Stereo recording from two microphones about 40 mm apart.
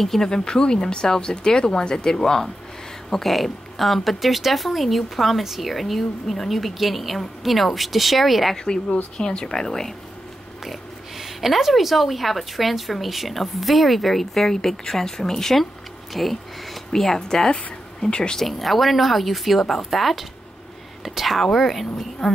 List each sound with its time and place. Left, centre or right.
0.0 s speech: centre
0.3 s speech: centre
8.6 s speech: centre
10.6 s speech: centre
18.1 s speech: left
18.4 s speech: centre